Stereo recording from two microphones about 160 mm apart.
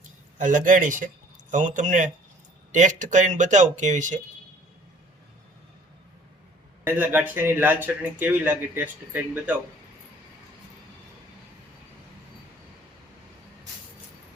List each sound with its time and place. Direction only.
0.3 s speech: 55° right (ahead or behind)
6.8 s speech: 10° right (ahead or behind)